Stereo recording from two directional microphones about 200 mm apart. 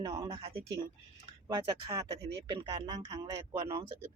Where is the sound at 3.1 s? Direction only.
15° right (ahead or behind).